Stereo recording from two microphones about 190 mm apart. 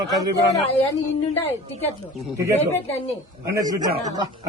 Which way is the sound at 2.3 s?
15° right (ahead or behind).